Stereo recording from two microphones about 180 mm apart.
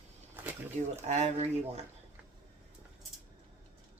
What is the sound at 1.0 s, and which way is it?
Speech, 40° right (ahead or behind).